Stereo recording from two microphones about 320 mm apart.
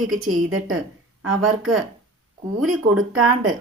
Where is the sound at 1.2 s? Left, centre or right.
Right.